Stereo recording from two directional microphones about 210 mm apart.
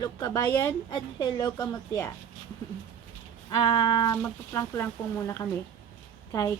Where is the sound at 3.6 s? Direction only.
20° left (ahead or behind).